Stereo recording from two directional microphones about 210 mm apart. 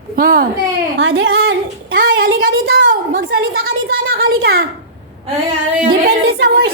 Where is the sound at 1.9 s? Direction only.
45° right (ahead or behind).